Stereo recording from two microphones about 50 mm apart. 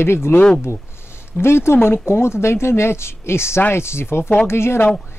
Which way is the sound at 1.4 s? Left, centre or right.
Left.